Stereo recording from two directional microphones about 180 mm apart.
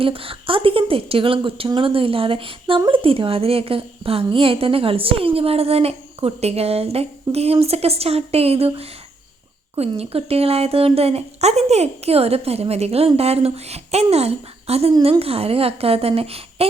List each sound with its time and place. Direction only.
0.0 s a woman's voice: 30° right (ahead or behind)